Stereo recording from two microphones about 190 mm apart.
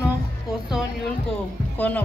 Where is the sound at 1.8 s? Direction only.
10° left (ahead or behind).